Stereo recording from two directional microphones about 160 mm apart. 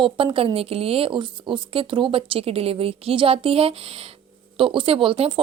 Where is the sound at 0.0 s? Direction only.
35° right (ahead or behind).